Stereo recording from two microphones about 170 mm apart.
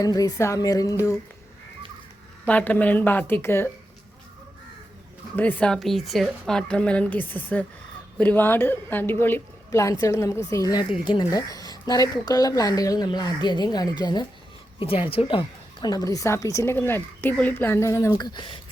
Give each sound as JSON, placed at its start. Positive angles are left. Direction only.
{"t": 0.0, "sound": "a woman's voice", "side_deg": 20}
{"t": 2.5, "sound": "a woman's voice", "side_deg": 10}
{"t": 5.4, "sound": "a woman's voice", "side_deg": 10}